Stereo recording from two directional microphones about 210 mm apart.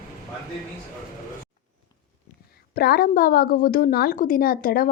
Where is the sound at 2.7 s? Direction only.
45° left (ahead or behind).